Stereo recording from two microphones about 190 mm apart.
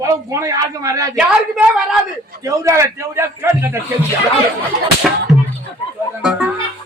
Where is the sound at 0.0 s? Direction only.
15° right (ahead or behind).